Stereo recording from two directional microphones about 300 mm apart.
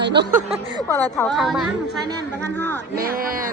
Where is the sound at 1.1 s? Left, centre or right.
Centre.